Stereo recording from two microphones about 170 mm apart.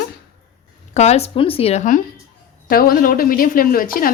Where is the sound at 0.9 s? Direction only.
40° left (ahead or behind).